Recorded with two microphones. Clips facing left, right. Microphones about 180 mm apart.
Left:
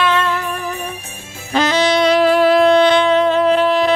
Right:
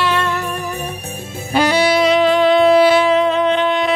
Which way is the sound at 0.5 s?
40° right (ahead or behind).